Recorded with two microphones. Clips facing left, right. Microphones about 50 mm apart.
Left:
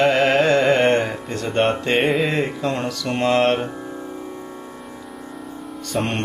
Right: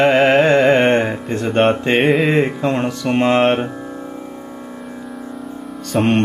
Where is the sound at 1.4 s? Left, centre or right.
Centre.